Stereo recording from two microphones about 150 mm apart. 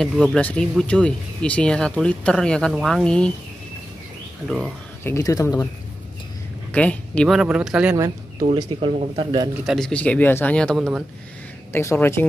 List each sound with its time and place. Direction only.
0.0 s speech: centre (ahead or behind)
4.5 s speech: 5° left (ahead or behind)
5.0 s speech: 20° left (ahead or behind)
6.7 s speech: 10° left (ahead or behind)
7.3 s speech: 5° right (ahead or behind)
8.5 s speech: 35° right (ahead or behind)
9.7 s speech: 5° left (ahead or behind)
11.7 s speech: 15° left (ahead or behind)